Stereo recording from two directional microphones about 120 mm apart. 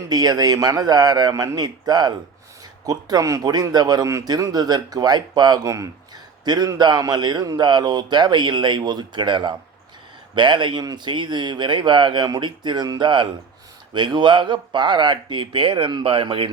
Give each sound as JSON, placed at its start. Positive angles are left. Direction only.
{"t": 0.1, "sound": "a man's voice", "side_deg": -35}